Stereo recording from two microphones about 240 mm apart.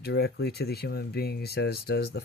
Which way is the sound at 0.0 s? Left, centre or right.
Left.